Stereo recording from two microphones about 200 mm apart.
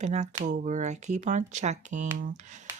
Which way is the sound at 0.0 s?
35° right (ahead or behind).